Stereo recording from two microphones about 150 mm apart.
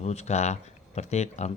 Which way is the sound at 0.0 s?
45° left (ahead or behind).